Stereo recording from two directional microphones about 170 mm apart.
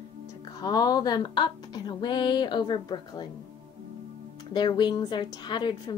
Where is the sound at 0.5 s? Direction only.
20° left (ahead or behind).